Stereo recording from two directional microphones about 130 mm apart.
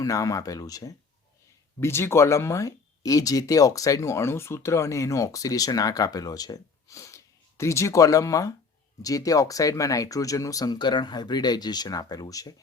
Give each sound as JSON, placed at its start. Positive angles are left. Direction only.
{"t": 0.0, "sound": "speech", "side_deg": 25}